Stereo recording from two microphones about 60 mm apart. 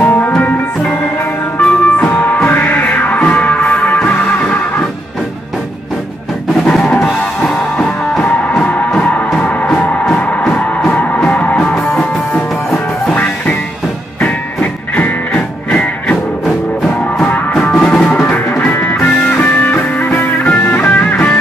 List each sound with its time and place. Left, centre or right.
0.0 s music: left
7.2 s music: centre
13.1 s music: left
17.6 s music: centre
18.6 s music: left